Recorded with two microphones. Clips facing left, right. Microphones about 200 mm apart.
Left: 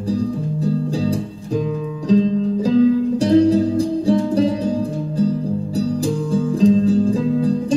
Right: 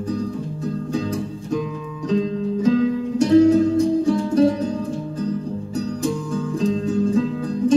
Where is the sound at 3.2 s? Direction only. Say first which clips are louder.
Right 2 dB; 35° left (ahead or behind).